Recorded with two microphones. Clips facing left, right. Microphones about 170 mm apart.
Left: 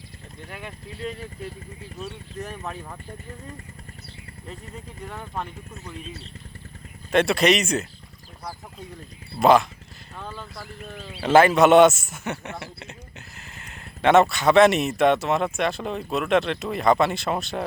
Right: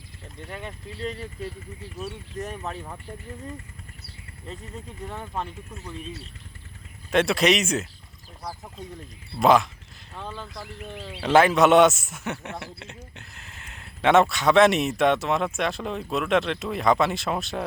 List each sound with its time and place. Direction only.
0.4 s speech: centre (ahead or behind)
7.1 s speech: centre (ahead or behind)
9.4 s speech: centre (ahead or behind)
10.6 s speech: 25° right (ahead or behind)
11.2 s speech: centre (ahead or behind)